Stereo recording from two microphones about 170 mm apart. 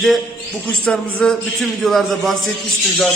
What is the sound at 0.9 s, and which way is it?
A man's voice, 5° left (ahead or behind).